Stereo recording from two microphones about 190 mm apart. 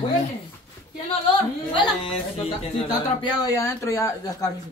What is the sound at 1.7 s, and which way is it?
Speech, 25° left (ahead or behind).